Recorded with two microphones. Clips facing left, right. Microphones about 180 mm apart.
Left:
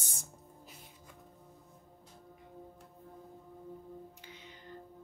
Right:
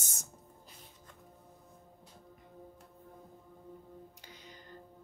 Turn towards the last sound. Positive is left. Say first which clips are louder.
# left 1 dB
turn(degrees=-40)  # may be behind; listen again after turning